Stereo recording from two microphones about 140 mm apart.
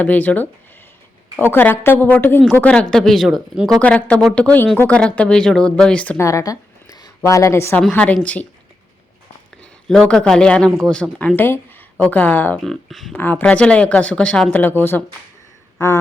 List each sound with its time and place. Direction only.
0.0 s speech: 10° left (ahead or behind)
6.1 s a woman's voice: 20° left (ahead or behind)
7.8 s speech: 10° left (ahead or behind)
9.9 s speech: 5° left (ahead or behind)
12.6 s speech: centre (ahead or behind)
13.1 s speech: 10° left (ahead or behind)